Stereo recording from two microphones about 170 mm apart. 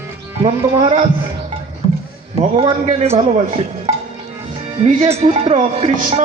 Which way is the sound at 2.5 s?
40° right (ahead or behind).